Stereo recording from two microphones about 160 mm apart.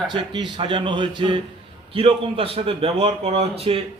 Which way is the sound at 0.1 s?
30° right (ahead or behind).